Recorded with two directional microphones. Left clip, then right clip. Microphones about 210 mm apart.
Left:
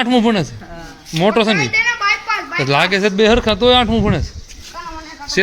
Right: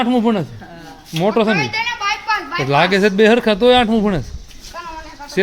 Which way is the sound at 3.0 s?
15° right (ahead or behind).